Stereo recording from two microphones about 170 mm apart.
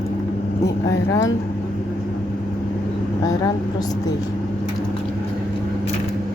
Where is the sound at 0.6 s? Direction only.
20° left (ahead or behind).